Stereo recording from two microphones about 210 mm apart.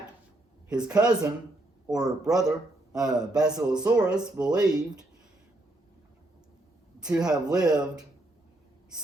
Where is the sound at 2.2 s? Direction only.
5° right (ahead or behind).